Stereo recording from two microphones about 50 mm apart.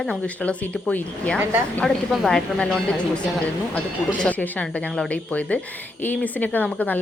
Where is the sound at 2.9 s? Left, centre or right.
Left.